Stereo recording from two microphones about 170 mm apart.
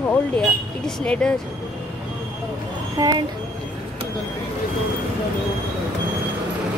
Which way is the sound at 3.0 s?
25° right (ahead or behind).